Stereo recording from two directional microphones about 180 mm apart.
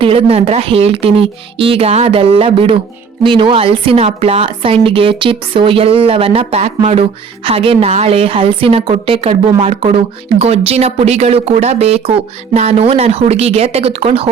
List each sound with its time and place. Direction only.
0.0 s speech: 30° right (ahead or behind)